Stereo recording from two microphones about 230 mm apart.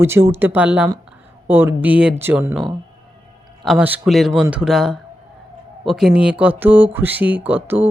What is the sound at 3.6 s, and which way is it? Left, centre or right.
Speech, centre.